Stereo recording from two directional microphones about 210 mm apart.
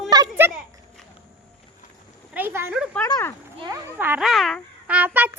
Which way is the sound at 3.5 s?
20° right (ahead or behind).